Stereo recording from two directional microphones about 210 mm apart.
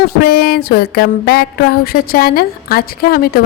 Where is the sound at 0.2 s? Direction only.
45° left (ahead or behind).